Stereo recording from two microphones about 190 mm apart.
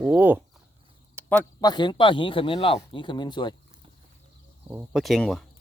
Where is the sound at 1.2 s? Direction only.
15° right (ahead or behind).